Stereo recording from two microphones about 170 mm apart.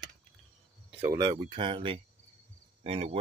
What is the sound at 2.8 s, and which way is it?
Cricket, 35° right (ahead or behind).